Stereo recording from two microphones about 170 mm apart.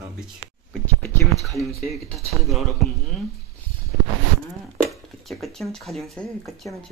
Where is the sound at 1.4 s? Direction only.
Centre (ahead or behind).